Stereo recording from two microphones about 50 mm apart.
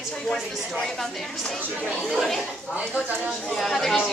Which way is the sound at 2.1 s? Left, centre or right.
Centre.